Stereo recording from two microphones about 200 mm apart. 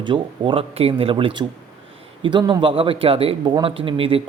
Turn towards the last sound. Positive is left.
turn(degrees=-25)  # may be behind; listen again after turning